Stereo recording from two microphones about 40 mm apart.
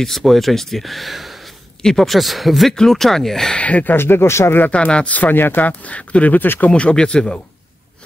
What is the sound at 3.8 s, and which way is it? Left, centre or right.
Speech, left.